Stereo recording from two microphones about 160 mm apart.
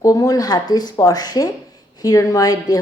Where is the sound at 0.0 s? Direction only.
20° left (ahead or behind).